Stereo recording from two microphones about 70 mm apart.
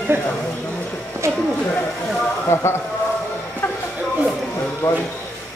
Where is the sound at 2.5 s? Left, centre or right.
Left.